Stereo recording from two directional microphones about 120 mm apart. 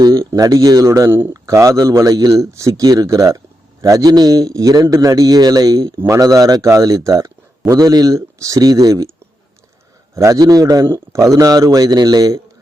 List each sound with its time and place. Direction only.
0.0 s a sound: 30° right (ahead or behind)
0.3 s a man's voice: 30° right (ahead or behind)
10.2 s a man's voice: 30° right (ahead or behind)